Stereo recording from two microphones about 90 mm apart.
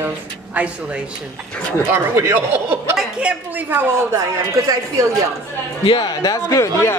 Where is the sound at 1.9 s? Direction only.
30° right (ahead or behind).